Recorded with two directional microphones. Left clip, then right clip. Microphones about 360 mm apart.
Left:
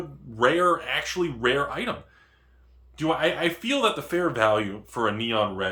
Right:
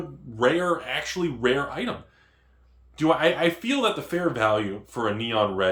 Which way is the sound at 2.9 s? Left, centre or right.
Centre.